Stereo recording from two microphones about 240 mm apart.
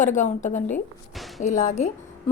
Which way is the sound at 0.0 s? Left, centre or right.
Left.